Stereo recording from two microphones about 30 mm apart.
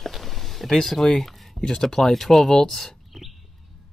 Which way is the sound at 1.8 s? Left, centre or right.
Centre.